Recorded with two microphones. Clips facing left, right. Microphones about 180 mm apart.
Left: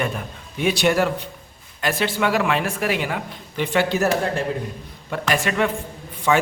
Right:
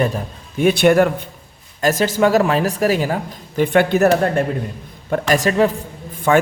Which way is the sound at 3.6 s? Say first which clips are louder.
Right 6 dB; 55° right (ahead or behind).